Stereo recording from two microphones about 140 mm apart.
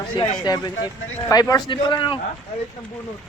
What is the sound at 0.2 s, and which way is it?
A man's voice, 30° left (ahead or behind).